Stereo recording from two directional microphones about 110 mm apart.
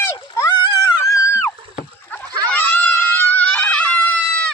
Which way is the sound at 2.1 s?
15° left (ahead or behind).